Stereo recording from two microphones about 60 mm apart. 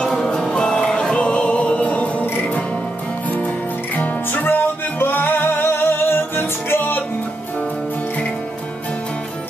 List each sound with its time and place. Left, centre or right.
0.0 s music: centre; by 2.2 s left
3.3 s music: left